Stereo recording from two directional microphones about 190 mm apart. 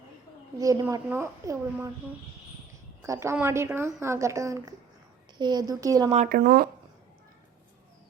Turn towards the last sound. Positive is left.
turn(degrees=-50)  # may be behind; listen again after turning